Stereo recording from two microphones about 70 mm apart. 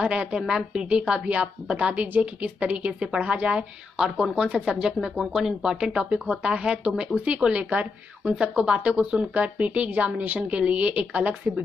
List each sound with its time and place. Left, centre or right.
0.0 s a woman's voice: centre